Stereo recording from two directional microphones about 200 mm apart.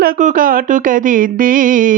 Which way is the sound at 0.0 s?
40° right (ahead or behind).